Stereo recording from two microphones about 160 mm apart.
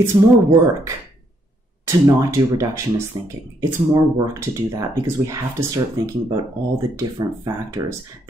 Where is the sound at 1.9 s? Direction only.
20° right (ahead or behind).